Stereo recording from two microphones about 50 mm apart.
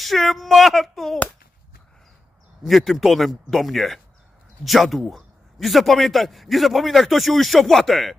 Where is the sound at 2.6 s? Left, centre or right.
Centre.